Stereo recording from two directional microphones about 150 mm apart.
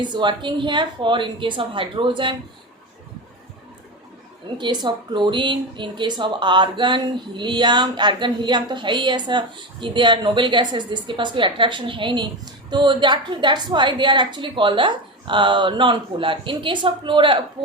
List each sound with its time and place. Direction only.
0.0 s speech: 30° right (ahead or behind)
4.5 s speech: 30° right (ahead or behind)